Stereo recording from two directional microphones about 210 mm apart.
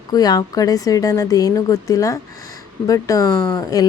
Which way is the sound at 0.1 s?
20° left (ahead or behind).